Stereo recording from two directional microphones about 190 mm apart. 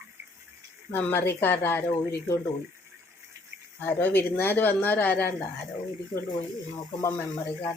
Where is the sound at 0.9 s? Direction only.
10° left (ahead or behind).